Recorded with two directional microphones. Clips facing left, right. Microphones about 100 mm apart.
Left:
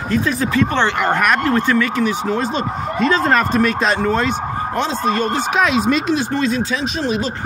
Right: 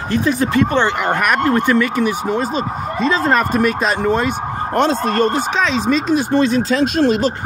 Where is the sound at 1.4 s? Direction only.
25° right (ahead or behind).